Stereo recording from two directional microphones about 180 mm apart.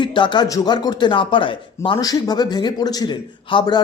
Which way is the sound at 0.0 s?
25° left (ahead or behind).